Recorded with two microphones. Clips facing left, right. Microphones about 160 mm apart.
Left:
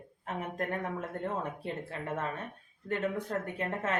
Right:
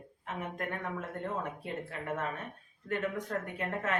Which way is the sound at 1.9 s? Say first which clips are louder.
Even; 30° left (ahead or behind).